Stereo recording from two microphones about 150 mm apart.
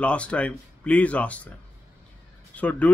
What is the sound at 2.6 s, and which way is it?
Speech, 10° left (ahead or behind).